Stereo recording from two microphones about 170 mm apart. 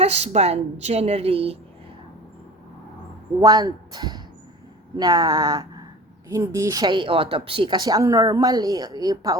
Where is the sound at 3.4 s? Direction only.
25° right (ahead or behind).